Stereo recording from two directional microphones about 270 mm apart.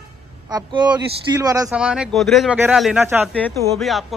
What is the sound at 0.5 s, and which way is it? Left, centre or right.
A man's voice, centre.